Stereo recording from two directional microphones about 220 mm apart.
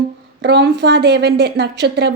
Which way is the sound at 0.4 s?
50° right (ahead or behind).